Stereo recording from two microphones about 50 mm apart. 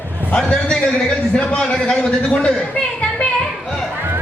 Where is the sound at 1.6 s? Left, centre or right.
Centre.